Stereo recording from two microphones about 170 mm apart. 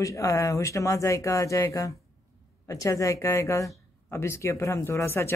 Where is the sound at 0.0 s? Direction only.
20° left (ahead or behind).